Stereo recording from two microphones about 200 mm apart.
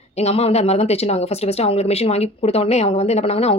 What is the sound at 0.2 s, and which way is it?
Speech, 30° left (ahead or behind).